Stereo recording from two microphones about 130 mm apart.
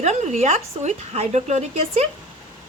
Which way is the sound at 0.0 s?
60° right (ahead or behind).